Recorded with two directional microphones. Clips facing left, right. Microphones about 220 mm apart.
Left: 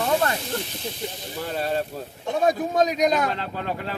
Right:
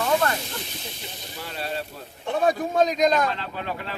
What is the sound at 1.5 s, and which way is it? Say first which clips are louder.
Speech: left 6 dB; 45° left (ahead or behind).